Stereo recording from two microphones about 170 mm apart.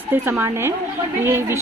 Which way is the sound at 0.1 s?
10° right (ahead or behind).